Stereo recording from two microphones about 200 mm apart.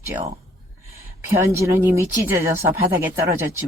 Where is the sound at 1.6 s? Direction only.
10° right (ahead or behind).